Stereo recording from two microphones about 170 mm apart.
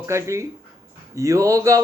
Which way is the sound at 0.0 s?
15° right (ahead or behind).